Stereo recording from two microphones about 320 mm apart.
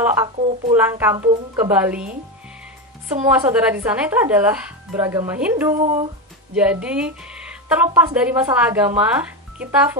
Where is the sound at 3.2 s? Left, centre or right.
Centre.